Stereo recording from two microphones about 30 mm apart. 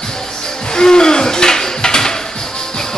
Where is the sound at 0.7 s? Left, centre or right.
Left.